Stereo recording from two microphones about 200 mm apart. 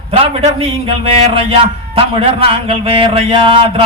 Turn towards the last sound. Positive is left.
turn(degrees=-25)  # may be behind; listen again after turning